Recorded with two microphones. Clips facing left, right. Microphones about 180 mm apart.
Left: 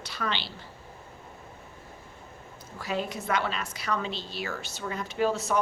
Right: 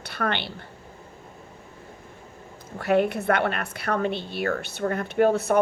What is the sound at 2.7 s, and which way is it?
A woman's voice, 60° right (ahead or behind).